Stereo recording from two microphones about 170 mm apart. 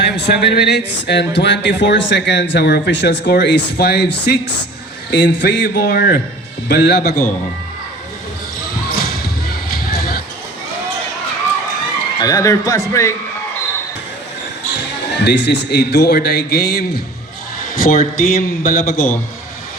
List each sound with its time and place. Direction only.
0.0 s speech: 80° left
5.6 s a man's voice: 65° left (ahead or behind)
6.7 s speech: 80° left
9.0 s basketball bounce: 65° left (ahead or behind)
9.9 s a sound: 65° left (ahead or behind)
12.2 s a man's voice: 20° left (ahead or behind)
15.1 s a man's voice: 85° left; by 17.0 s 70° left (ahead or behind)
17.7 s a man's voice: 55° left (ahead or behind)